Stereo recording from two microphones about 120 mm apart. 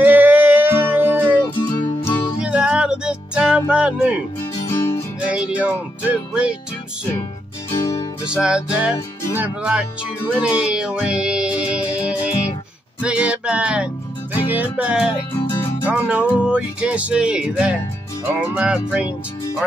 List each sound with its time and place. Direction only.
0.0 s music: 15° right (ahead or behind)
1.7 s music: 40° left (ahead or behind)
2.4 s music: 10° right (ahead or behind)
4.4 s music: 20° left (ahead or behind)
5.3 s music: 10° right (ahead or behind)
7.9 s music: 40° left (ahead or behind)
8.3 s music: 5° right (ahead or behind)